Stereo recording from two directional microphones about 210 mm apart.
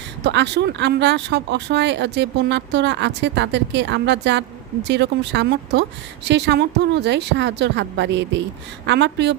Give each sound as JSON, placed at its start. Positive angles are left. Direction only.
{"t": 0.2, "sound": "speech", "side_deg": -55}